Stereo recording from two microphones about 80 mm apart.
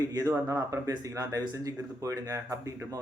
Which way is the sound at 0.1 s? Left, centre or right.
Right.